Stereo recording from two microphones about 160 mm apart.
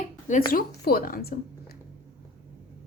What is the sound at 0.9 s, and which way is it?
Speech, 65° left (ahead or behind).